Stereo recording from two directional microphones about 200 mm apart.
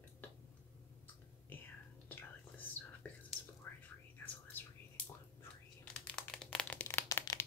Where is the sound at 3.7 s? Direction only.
10° left (ahead or behind).